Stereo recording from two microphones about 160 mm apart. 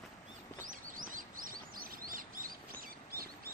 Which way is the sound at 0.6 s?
60° right (ahead or behind).